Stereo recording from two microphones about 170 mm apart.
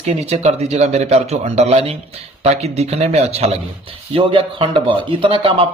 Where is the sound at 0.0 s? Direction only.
40° right (ahead or behind).